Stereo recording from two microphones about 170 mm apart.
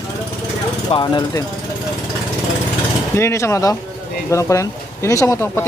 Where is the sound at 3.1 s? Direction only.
15° left (ahead or behind).